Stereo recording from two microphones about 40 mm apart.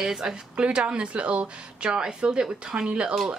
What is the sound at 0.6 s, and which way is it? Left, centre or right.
Speech, right.